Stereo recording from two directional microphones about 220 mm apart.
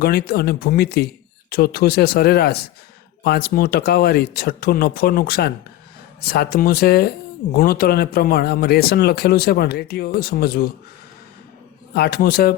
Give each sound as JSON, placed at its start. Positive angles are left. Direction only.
{"t": 0.0, "sound": "speech", "side_deg": 45}
{"t": 11.9, "sound": "speech", "side_deg": 45}